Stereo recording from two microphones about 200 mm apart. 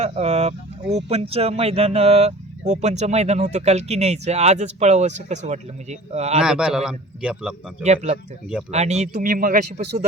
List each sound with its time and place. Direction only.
0.0 s speech: 30° right (ahead or behind)
6.4 s a man's voice: 5° right (ahead or behind)
8.7 s speech: 35° right (ahead or behind)